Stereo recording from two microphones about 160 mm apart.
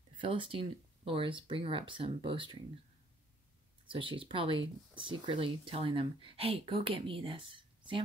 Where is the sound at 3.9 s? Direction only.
30° right (ahead or behind).